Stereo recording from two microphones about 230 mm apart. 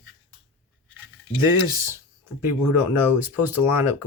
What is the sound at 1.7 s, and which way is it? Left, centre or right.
Speech, centre.